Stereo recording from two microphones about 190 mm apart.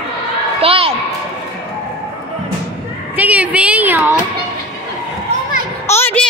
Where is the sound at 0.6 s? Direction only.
30° right (ahead or behind).